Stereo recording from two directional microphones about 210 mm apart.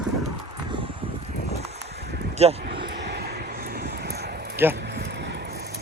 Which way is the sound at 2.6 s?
50° right (ahead or behind).